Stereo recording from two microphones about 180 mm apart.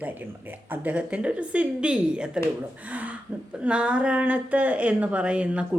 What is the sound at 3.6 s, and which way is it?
A woman's voice, 5° right (ahead or behind).